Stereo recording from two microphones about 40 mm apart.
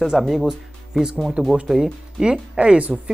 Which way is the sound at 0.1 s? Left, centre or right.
Centre.